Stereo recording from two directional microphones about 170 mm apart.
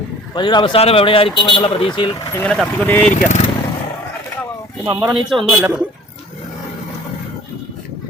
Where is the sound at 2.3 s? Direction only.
5° left (ahead or behind).